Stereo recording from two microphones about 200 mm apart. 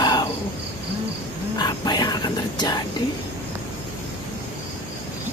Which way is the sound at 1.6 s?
20° left (ahead or behind).